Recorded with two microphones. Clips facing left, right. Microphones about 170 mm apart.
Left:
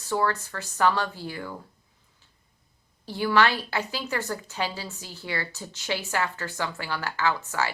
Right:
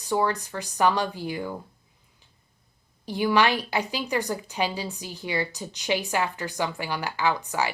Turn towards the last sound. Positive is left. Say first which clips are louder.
# right 1 dB
turn(degrees=-15)  # may be behind; listen again after turning